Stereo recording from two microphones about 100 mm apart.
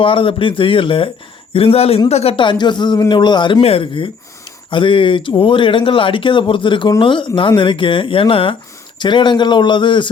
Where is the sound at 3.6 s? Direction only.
65° left (ahead or behind).